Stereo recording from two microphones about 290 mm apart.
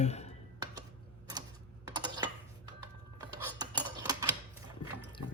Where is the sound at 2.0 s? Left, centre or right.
Centre.